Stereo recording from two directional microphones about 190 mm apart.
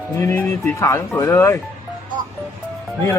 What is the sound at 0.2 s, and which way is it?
Speech, 15° left (ahead or behind).